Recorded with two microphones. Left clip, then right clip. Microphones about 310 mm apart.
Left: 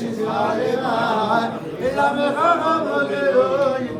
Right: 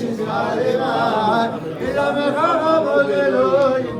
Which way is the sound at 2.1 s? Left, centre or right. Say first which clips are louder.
Even; centre.